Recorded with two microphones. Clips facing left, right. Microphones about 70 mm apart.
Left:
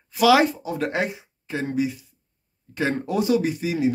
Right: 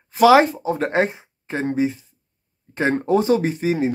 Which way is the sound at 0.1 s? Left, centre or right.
Right.